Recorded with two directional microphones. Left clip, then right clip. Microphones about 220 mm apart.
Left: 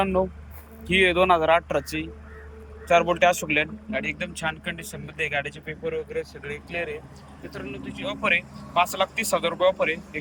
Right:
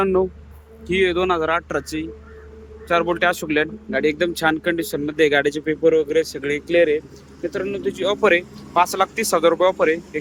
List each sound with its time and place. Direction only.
0.0 s speech: 15° right (ahead or behind)